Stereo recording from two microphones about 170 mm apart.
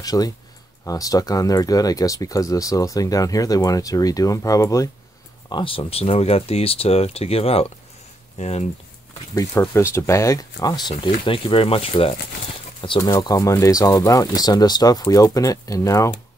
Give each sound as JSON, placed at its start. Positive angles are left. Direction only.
{"t": 0.0, "sound": "speech", "side_deg": 20}
{"t": 5.5, "sound": "speech", "side_deg": 30}
{"t": 9.5, "sound": "speech", "side_deg": 10}